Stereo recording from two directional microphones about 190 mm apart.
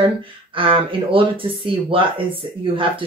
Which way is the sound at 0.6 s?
25° right (ahead or behind).